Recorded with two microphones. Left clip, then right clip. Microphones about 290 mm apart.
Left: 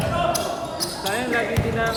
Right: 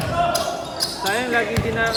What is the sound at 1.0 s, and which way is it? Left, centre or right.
Basketball bounce, right.